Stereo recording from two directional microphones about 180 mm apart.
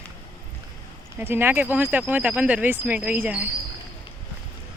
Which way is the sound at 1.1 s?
10° right (ahead or behind).